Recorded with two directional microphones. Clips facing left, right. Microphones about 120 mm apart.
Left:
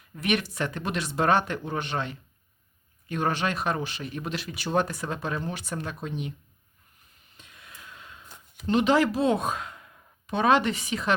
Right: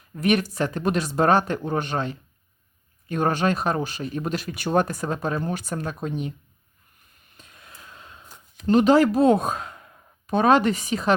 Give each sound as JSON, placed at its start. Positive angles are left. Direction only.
{"t": 0.2, "sound": "speech", "side_deg": -40}
{"t": 7.3, "sound": "gasp", "side_deg": -40}
{"t": 8.6, "sound": "speech", "side_deg": -40}